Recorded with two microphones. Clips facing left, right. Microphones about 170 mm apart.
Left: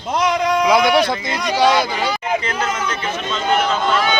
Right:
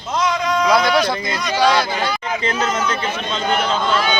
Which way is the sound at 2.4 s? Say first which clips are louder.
Right 2 dB; 30° right (ahead or behind).